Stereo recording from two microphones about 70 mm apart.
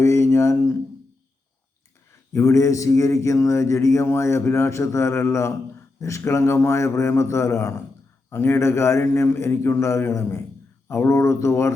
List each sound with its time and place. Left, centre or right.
0.0 s mantra: left
2.3 s mantra: left
8.3 s a man's voice: left
10.8 s mantra: left